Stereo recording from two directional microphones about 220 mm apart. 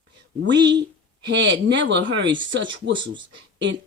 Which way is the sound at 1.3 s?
55° right (ahead or behind).